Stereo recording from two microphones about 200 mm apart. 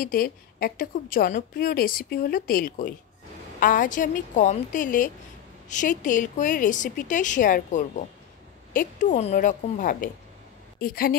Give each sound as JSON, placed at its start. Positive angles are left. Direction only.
{"t": 0.0, "sound": "a woman's voice", "side_deg": 45}